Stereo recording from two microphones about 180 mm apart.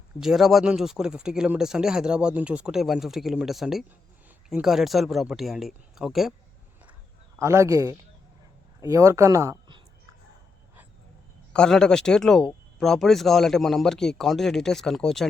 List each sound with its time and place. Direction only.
0.2 s speech: centre (ahead or behind)
7.3 s a man's voice: 15° right (ahead or behind)
11.5 s speech: 5° left (ahead or behind)